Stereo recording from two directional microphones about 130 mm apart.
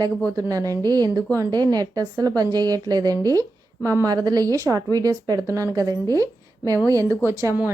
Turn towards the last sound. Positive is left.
turn(degrees=-15)  # may be behind; listen again after turning